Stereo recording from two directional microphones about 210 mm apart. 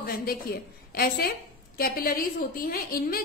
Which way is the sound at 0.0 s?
45° left (ahead or behind).